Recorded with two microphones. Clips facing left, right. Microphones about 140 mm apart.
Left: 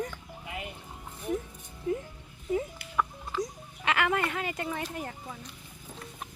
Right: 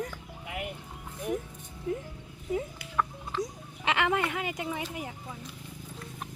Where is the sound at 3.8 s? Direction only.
20° right (ahead or behind).